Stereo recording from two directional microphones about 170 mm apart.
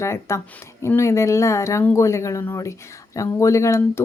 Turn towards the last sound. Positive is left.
turn(degrees=20)  # may be behind; listen again after turning